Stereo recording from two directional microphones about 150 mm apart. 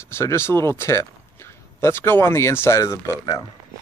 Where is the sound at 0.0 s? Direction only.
15° left (ahead or behind).